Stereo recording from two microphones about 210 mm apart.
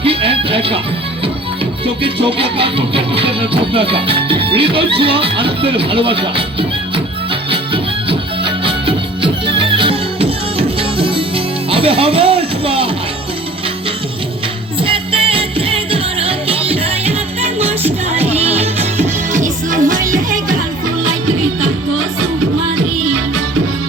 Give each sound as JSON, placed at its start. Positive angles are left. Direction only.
{"t": 0.0, "sound": "music", "side_deg": -25}
{"t": 2.2, "sound": "music", "side_deg": -25}
{"t": 14.8, "sound": "music", "side_deg": -25}